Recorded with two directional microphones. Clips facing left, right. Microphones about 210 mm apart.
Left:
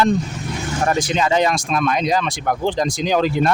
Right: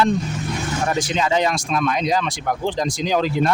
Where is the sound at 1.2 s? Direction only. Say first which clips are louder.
Left 2 dB; 55° left (ahead or behind).